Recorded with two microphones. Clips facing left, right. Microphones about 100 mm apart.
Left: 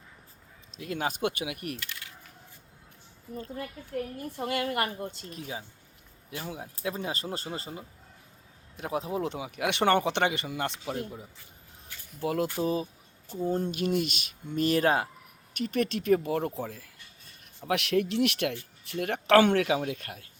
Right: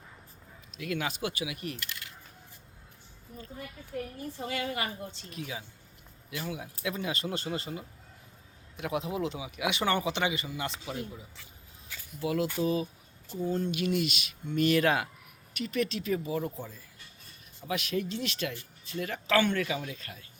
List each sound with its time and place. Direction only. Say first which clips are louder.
0.7 s speech: left 2 dB; 30° left (ahead or behind); by 1.8 s 55° left (ahead or behind)
3.3 s speech: left 6 dB; 70° left (ahead or behind)
4.4 s speech: left 5 dB; 60° left (ahead or behind); by 9.3 s 40° left (ahead or behind)
9.3 s speech: left 2 dB; 55° left (ahead or behind); by 15.1 s 35° left (ahead or behind)
15.5 s speech: left 2 dB; 50° left (ahead or behind)